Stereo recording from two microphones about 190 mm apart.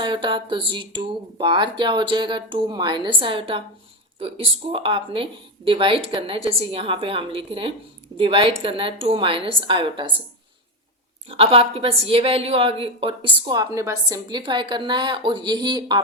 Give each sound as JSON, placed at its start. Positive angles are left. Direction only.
{"t": 0.0, "sound": "a woman's voice", "side_deg": -25}
{"t": 11.3, "sound": "a woman's voice", "side_deg": -30}